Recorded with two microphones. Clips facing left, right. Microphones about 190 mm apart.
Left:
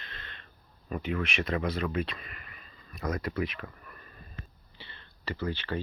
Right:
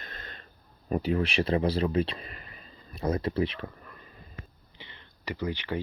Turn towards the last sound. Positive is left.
turn(degrees=-15)  # may be behind; listen again after turning